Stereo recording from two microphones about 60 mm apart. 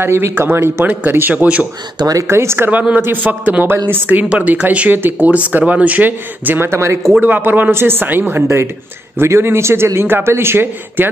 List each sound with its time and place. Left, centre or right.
0.0 s a man's voice: right
2.2 s a man's voice: right
2.7 s speech: right
3.7 s a man's voice: right
4.1 s speech: right
6.7 s a man's voice: right
7.1 s a man's voice: right